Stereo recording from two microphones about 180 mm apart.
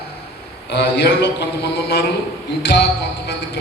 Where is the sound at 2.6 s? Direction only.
70° left (ahead or behind).